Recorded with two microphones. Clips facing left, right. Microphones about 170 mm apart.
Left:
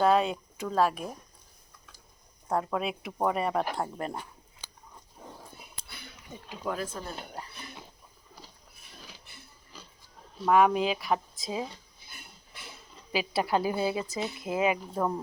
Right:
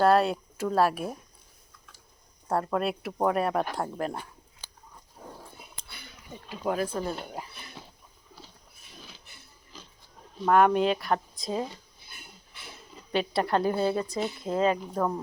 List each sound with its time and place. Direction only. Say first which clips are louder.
0.0 s speech: right 2 dB; 5° right (ahead or behind)
2.5 s speech: right 2 dB; centre (ahead or behind)
6.7 s speech: right 5 dB; 60° right (ahead or behind)
6.9 s speech: right 7 dB; 10° right (ahead or behind)
10.4 s speech: right 2 dB; centre (ahead or behind)
13.1 s speech: right 2 dB; 5° left (ahead or behind)